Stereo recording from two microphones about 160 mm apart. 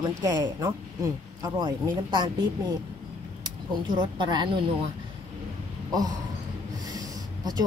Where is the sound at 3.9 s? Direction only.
30° right (ahead or behind).